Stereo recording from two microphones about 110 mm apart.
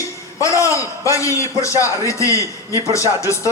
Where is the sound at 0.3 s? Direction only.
30° left (ahead or behind).